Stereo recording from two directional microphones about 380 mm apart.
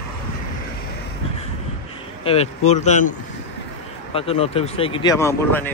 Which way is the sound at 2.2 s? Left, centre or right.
Centre.